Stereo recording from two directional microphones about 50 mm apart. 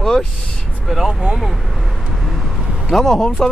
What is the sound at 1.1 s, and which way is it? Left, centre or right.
Speech, centre.